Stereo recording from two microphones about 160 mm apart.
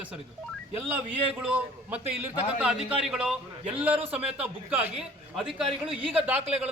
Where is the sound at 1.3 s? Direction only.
10° right (ahead or behind).